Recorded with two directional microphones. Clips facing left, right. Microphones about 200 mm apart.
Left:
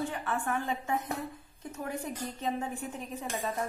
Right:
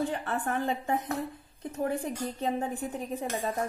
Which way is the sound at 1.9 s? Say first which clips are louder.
Right 4 dB; 55° right (ahead or behind).